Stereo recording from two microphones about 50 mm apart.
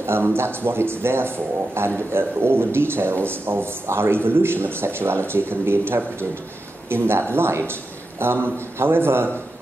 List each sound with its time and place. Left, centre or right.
0.0 s a man's voice: right